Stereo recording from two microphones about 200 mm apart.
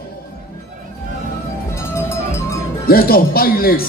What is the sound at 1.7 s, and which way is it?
Music, 15° left (ahead or behind).